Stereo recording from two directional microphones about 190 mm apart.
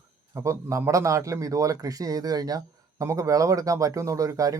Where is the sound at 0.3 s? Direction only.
15° right (ahead or behind).